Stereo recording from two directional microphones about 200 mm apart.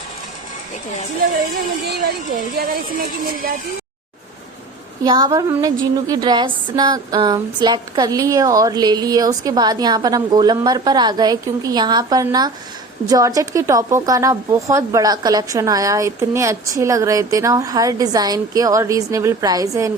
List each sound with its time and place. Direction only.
1.9 s speech: 50° right (ahead or behind)
5.0 s a sound: 20° right (ahead or behind)
13.1 s a woman's voice: 15° right (ahead or behind)